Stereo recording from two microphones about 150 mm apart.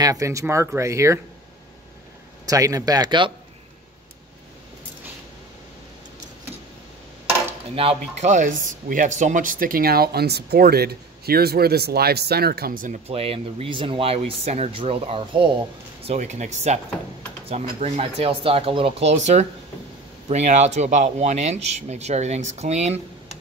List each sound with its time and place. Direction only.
0.0 s speech: 20° right (ahead or behind)
2.4 s speech: 25° right (ahead or behind)
7.7 s speech: 40° right (ahead or behind)
8.3 s speech: 60° right (ahead or behind)
13.1 s speech: 40° right (ahead or behind)
16.1 s speech: 50° right (ahead or behind)
19.1 s speech: 50° right (ahead or behind)